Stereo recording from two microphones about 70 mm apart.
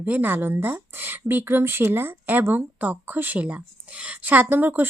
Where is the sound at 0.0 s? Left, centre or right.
Right.